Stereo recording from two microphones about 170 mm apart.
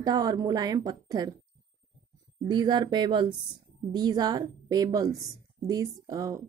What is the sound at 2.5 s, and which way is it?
Speech, 25° right (ahead or behind).